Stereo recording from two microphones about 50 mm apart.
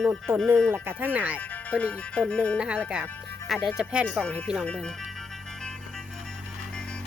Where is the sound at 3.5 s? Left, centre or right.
Centre.